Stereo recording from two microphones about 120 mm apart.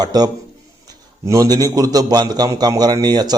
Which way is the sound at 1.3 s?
30° right (ahead or behind).